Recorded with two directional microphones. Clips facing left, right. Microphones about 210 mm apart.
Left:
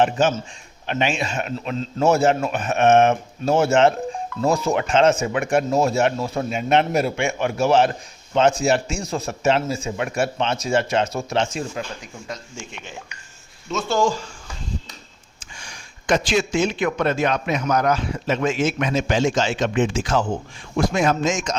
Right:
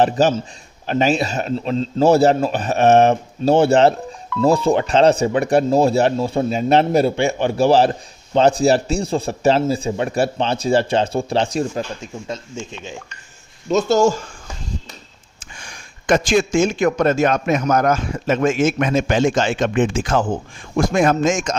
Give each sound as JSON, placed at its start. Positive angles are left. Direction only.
{"t": 0.0, "sound": "speech", "side_deg": -35}
{"t": 11.9, "sound": "speech", "side_deg": -25}
{"t": 13.7, "sound": "speech", "side_deg": -40}
{"t": 15.5, "sound": "speech", "side_deg": -55}